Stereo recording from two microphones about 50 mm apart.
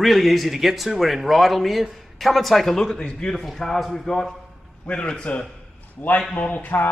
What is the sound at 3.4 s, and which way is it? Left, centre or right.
Speech, centre.